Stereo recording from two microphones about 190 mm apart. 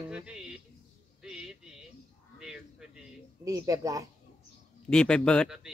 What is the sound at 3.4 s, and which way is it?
Speech, 20° right (ahead or behind).